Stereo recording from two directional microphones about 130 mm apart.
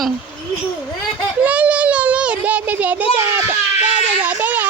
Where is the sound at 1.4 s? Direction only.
10° right (ahead or behind).